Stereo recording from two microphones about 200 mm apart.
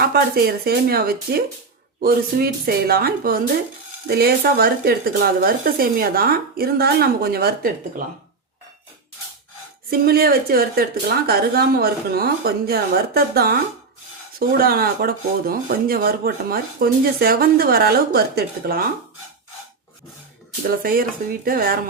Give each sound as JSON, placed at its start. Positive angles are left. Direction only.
{"t": 0.0, "sound": "speech", "side_deg": -50}
{"t": 9.9, "sound": "speech", "side_deg": -50}
{"t": 20.7, "sound": "speech", "side_deg": -45}